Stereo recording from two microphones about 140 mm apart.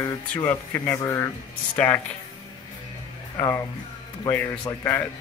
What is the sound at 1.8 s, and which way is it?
Speech, 10° left (ahead or behind).